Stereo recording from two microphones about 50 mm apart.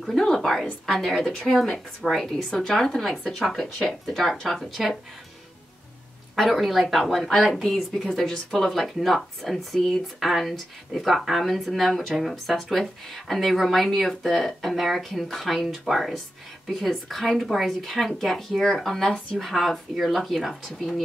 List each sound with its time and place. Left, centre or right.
0.0 s a woman's voice: centre
6.3 s a woman's voice: centre
8.7 s speech: centre